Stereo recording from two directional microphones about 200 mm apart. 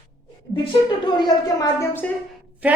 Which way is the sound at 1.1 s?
20° left (ahead or behind).